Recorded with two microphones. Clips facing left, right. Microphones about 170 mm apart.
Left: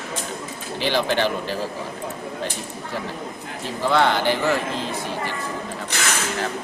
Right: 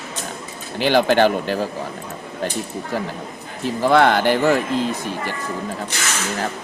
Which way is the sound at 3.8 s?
55° right (ahead or behind).